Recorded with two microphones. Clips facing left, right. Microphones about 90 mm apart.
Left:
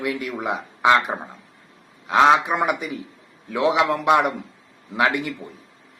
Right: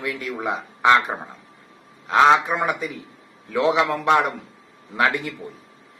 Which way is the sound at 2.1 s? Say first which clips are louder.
Even; 5° left (ahead or behind).